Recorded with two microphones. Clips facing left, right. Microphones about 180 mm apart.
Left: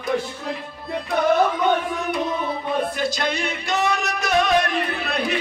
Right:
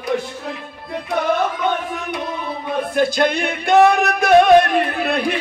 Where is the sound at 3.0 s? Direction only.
55° right (ahead or behind).